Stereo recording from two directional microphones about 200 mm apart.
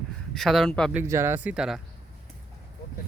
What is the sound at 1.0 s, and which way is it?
Speech, 15° right (ahead or behind).